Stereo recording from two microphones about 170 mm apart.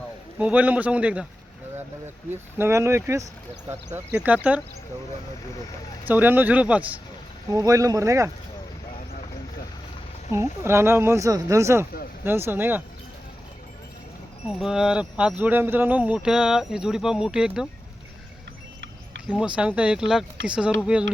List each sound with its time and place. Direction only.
0.3 s speech: 10° right (ahead or behind)
2.3 s speech: 15° right (ahead or behind)
6.1 s speech: 10° right (ahead or behind)
7.5 s speech: 20° right (ahead or behind)
10.3 s speech: 15° right (ahead or behind)
14.4 s speech: centre (ahead or behind)
19.3 s speech: 5° right (ahead or behind)